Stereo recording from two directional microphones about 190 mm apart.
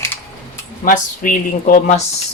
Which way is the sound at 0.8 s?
45° left (ahead or behind).